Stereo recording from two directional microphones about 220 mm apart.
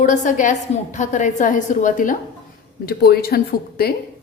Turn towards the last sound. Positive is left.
turn(degrees=45)  # may be behind; listen again after turning